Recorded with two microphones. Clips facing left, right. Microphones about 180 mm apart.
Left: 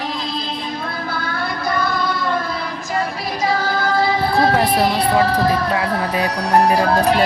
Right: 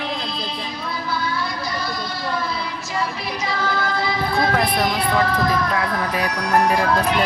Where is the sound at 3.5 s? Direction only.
40° left (ahead or behind).